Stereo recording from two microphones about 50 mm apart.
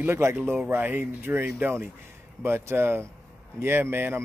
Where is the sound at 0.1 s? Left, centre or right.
Right.